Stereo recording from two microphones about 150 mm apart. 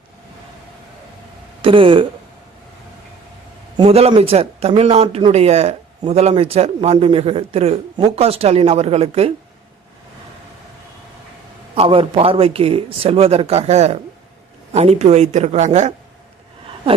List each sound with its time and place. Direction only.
1.6 s speech: 35° right (ahead or behind)
3.8 s speech: 45° right (ahead or behind)
11.7 s speech: 40° right (ahead or behind)